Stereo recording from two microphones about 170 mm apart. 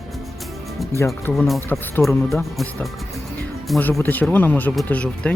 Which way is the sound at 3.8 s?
10° left (ahead or behind).